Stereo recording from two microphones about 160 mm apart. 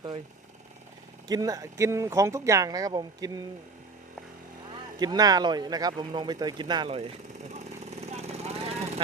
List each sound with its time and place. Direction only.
1.3 s speech: 25° right (ahead or behind)
4.9 s speech: 25° right (ahead or behind); by 8.9 s 40° right (ahead or behind)